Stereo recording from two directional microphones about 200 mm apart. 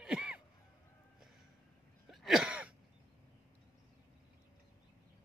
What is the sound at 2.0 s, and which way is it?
Throat clearing, centre (ahead or behind).